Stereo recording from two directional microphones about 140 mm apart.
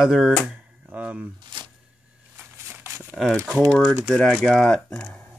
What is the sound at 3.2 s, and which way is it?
Speech, 5° left (ahead or behind).